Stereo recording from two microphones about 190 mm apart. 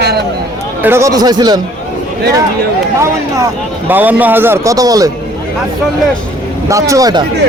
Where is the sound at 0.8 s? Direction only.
15° right (ahead or behind).